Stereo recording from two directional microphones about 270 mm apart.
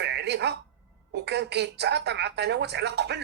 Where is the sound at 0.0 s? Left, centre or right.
Right.